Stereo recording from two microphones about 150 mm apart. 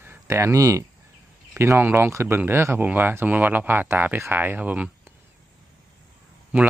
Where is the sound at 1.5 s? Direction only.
15° right (ahead or behind).